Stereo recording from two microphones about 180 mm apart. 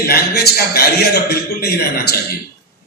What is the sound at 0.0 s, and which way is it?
A man's voice, 60° left (ahead or behind).